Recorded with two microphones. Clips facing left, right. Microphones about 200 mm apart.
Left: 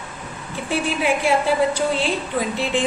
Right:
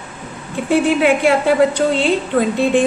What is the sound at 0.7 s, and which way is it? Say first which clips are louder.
A woman's voice: right 8 dB; 60° right (ahead or behind).